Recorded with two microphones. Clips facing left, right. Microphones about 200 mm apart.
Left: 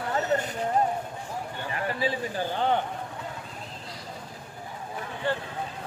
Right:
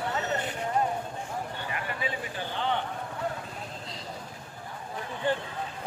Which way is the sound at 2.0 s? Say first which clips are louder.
Left 6 dB; 35° left (ahead or behind).